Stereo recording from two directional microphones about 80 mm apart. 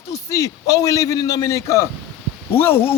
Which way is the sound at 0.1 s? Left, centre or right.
Left.